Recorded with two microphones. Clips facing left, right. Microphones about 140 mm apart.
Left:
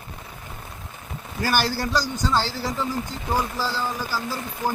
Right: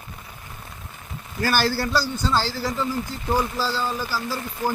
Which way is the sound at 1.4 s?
15° left (ahead or behind).